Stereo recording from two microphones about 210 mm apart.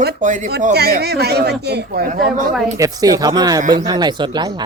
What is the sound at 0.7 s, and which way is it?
Speech, 50° right (ahead or behind).